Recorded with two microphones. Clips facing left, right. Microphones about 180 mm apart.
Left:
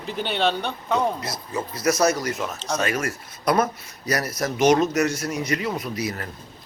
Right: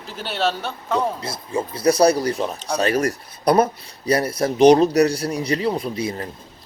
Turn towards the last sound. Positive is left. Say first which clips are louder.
# right 3 dB
turn(degrees=-25)  # may be behind; listen again after turning